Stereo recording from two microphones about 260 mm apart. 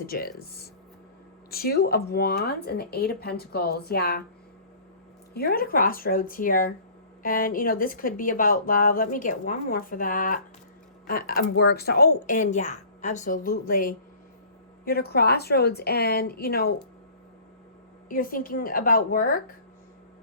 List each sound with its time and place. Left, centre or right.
0.0 s speech: left
5.3 s speech: left
18.1 s speech: left